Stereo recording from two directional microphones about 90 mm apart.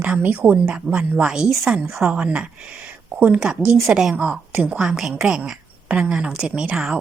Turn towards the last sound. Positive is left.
turn(degrees=-10)  # may be behind; listen again after turning